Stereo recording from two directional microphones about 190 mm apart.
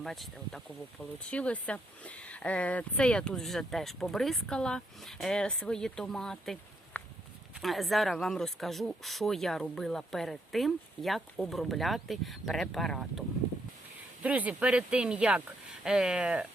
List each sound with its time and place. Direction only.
0.0 s speech: centre (ahead or behind)